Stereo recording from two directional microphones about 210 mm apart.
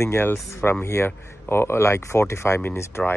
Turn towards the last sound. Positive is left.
turn(degrees=10)  # may be behind; listen again after turning